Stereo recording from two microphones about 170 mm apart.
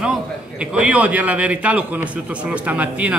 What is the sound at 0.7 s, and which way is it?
A man's voice, 5° right (ahead or behind).